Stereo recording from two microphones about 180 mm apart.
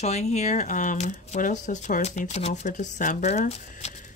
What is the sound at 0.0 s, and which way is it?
Speech, 40° left (ahead or behind).